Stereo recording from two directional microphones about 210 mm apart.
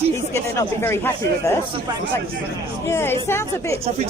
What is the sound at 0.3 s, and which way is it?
Speech, 15° left (ahead or behind).